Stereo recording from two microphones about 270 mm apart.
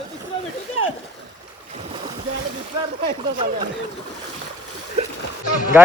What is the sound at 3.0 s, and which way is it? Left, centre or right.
Speech, centre.